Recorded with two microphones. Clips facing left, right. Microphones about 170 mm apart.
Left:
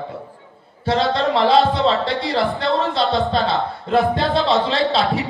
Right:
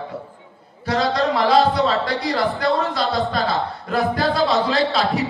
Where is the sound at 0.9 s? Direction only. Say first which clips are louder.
Left 1 dB; 25° left (ahead or behind).